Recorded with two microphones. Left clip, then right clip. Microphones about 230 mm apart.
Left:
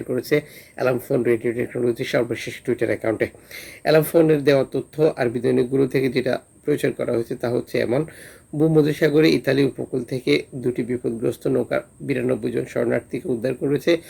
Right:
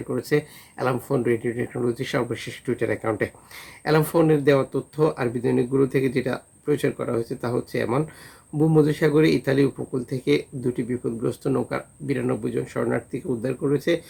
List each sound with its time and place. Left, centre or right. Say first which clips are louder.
0.1 s speech: left 2 dB; centre
2.3 s speech: left 3 dB; right
2.6 s speech: left 3 dB; centre